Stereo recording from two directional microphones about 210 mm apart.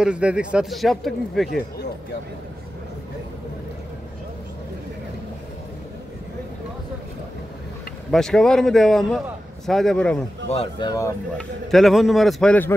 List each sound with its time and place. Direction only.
0.0 s a man's voice: 5° right (ahead or behind)
8.1 s a man's voice: centre (ahead or behind)
10.5 s speech: 25° left (ahead or behind)
11.3 s a man's voice: centre (ahead or behind)